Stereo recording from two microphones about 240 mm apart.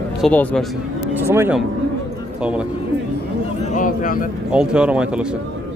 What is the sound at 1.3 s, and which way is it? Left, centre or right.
Speech, centre.